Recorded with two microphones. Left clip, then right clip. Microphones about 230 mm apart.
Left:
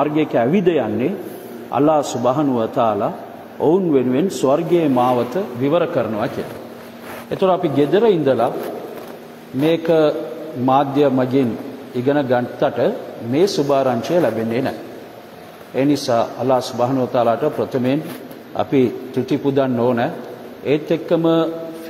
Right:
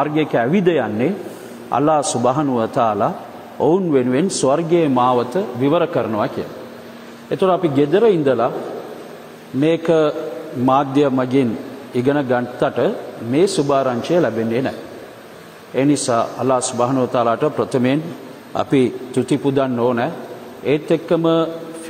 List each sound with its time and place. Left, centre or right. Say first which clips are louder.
0.0 s a man's voice: even; right
9.6 s a man's voice: even; right
15.7 s a man's voice: even; right